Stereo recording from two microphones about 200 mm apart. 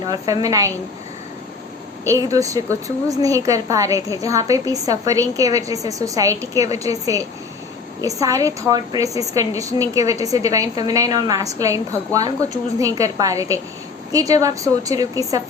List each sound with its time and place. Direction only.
0.4 s a woman's voice: 15° right (ahead or behind)
2.0 s a woman's voice: 15° right (ahead or behind)